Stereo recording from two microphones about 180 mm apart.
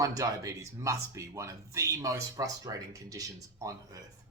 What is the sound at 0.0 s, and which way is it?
A man's voice, 20° right (ahead or behind).